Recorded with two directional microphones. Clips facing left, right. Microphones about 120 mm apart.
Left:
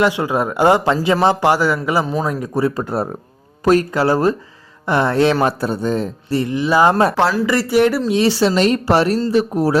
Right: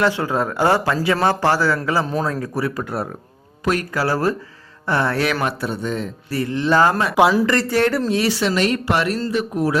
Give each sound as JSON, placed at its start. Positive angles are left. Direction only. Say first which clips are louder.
{"t": 0.0, "sound": "speech", "louder": "left 3 dB", "side_deg": 15}
{"t": 3.9, "sound": "a man's voice", "louder": "left 4 dB", "side_deg": 20}
{"t": 6.4, "sound": "speech", "louder": "left 1 dB", "side_deg": 10}
{"t": 7.2, "sound": "speech", "louder": "right 2 dB", "side_deg": -10}
{"t": 7.4, "sound": "speech", "louder": "left 3 dB", "side_deg": 10}
{"t": 8.1, "sound": "a man's voice", "louder": "left 4 dB", "side_deg": 30}